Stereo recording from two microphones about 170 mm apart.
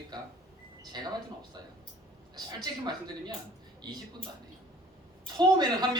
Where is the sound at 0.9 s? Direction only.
25° right (ahead or behind).